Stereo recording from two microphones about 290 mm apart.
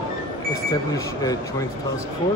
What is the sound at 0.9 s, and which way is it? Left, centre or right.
Speech, centre.